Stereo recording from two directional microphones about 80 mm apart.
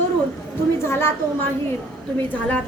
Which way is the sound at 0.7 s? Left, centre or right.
Left.